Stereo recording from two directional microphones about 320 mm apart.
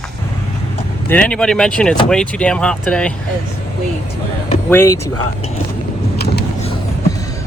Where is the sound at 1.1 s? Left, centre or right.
Centre.